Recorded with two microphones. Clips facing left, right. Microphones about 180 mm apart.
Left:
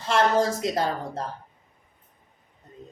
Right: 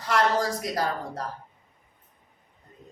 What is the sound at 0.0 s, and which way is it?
Speech, 25° left (ahead or behind).